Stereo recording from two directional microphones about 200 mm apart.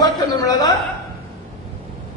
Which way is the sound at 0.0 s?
20° left (ahead or behind).